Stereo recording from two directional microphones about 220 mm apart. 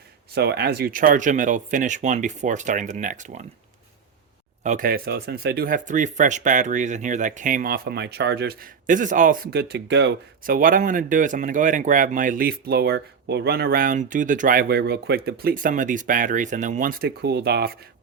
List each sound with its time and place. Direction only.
0.3 s speech: 50° right (ahead or behind)
4.6 s speech: 35° right (ahead or behind)